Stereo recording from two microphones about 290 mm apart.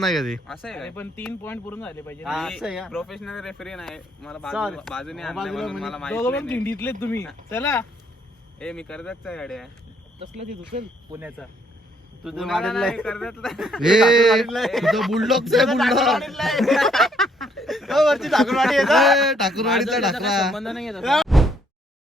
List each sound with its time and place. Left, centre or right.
0.0 s speech: centre
10.2 s speech: right
11.1 s speech: centre